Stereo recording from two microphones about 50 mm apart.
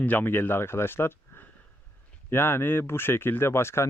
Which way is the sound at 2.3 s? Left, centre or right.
Left.